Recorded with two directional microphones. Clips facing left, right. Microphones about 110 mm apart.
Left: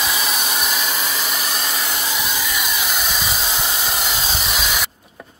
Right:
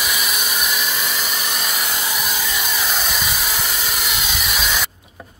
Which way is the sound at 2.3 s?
20° right (ahead or behind).